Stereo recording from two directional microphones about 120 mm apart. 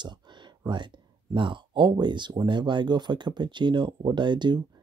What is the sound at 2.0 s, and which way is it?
Speech, 40° right (ahead or behind).